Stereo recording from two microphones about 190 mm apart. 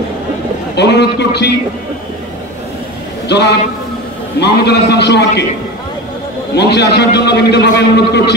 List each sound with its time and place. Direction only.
0.7 s a man's voice: 60° left (ahead or behind)
3.3 s a man's voice: 60° left (ahead or behind)
6.5 s a man's voice: 60° left (ahead or behind)